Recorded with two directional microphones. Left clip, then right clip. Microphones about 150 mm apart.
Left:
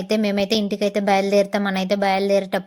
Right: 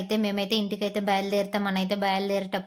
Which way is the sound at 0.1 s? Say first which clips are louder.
Left 7 dB; 35° left (ahead or behind).